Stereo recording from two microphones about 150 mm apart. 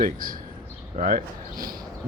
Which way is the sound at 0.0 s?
70° right (ahead or behind).